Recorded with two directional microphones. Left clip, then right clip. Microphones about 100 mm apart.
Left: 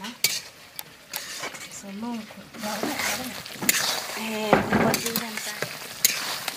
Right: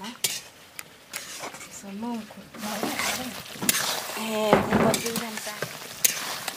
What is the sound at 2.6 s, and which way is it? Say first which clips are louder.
Speech: left 1 dB; 10° right (ahead or behind).